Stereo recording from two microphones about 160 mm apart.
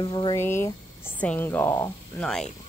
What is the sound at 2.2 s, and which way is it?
Speech, 5° left (ahead or behind).